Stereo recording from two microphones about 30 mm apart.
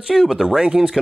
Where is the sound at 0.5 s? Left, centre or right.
Right.